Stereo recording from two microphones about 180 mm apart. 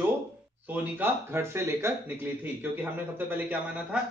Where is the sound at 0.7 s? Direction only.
10° right (ahead or behind).